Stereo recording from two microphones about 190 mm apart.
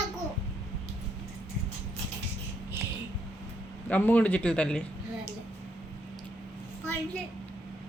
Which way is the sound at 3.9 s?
10° left (ahead or behind).